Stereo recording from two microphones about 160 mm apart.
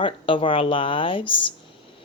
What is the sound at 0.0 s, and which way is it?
Speech, 35° left (ahead or behind).